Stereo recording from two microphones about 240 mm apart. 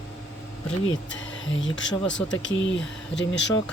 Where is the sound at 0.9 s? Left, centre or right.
Left.